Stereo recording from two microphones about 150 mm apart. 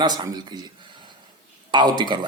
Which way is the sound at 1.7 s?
30° right (ahead or behind).